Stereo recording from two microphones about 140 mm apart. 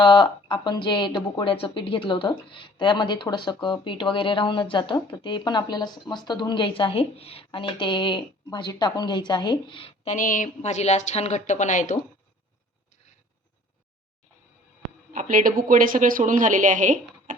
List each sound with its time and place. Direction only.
0.0 s speech: 35° left (ahead or behind)
10.1 s a woman's voice: 70° left (ahead or behind)
15.1 s a woman's voice: 70° right (ahead or behind)